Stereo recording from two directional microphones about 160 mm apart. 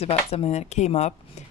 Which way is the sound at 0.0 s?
40° left (ahead or behind).